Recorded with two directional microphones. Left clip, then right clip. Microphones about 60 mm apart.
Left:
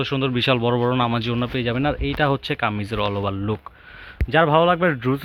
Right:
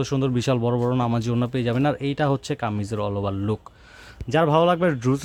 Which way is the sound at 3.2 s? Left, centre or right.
Right.